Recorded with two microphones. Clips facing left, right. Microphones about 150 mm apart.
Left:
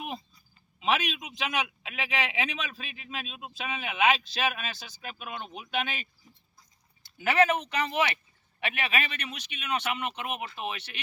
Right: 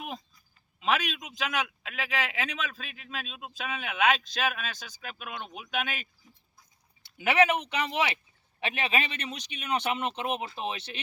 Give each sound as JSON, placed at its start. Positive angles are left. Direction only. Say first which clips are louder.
{"t": 0.8, "sound": "a man's voice", "louder": "left 1 dB", "side_deg": 5}
{"t": 5.5, "sound": "a sound", "louder": "left 1 dB", "side_deg": 0}
{"t": 7.2, "sound": "speech", "louder": "even", "side_deg": -15}